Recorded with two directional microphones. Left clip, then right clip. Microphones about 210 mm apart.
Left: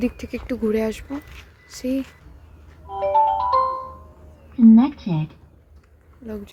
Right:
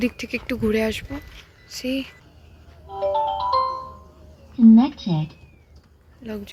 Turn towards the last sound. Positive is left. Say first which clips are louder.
# even
turn(degrees=5)  # may be behind; listen again after turning